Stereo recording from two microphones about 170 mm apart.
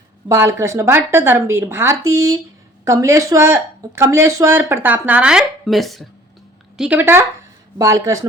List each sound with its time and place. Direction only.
0.3 s speech: 15° right (ahead or behind)